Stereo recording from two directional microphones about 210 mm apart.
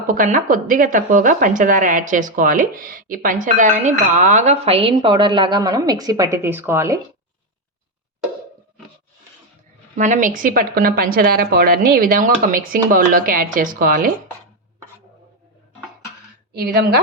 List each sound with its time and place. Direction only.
0.1 s a woman's voice: 40° right (ahead or behind); by 7.0 s 10° right (ahead or behind)
9.9 s a woman's voice: 35° right (ahead or behind)
16.6 s a woman's voice: 50° right (ahead or behind)